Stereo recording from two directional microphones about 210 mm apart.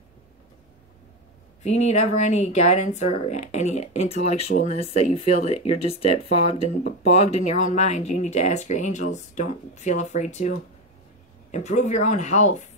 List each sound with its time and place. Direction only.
1.6 s speech: 35° left (ahead or behind)
11.5 s speech: 35° left (ahead or behind)